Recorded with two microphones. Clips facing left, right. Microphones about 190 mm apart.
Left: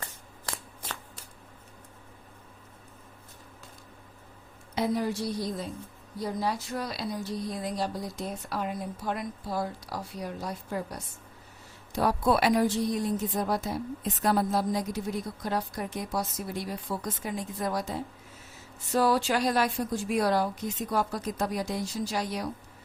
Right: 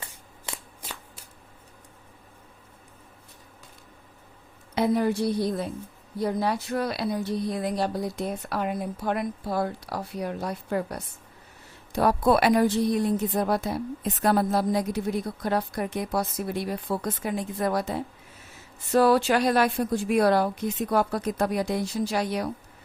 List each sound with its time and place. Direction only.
0.5 s shuffling cards: 5° right (ahead or behind)
4.7 s a woman's voice: 60° right (ahead or behind)